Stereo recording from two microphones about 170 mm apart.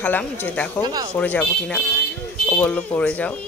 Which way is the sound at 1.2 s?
5° left (ahead or behind).